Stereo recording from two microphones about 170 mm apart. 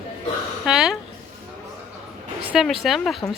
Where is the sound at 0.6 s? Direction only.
5° right (ahead or behind).